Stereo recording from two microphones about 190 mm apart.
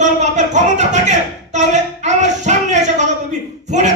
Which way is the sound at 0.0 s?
40° right (ahead or behind).